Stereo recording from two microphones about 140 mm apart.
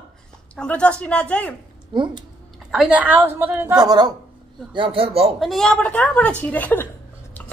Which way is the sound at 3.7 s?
30° right (ahead or behind).